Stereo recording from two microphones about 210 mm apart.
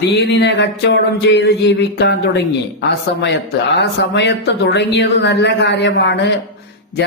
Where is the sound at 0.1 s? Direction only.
55° left (ahead or behind).